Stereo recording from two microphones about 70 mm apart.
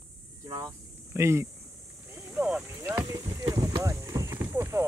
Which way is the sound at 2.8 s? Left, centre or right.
Right.